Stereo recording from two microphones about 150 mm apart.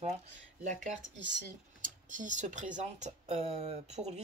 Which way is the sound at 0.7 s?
50° right (ahead or behind).